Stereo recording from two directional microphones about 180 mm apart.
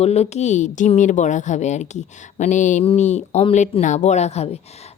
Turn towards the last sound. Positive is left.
turn(degrees=35)  # may be behind; listen again after turning